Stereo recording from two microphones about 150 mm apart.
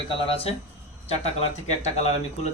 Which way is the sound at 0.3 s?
40° left (ahead or behind).